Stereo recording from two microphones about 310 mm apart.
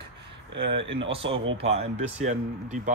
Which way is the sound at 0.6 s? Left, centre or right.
Right.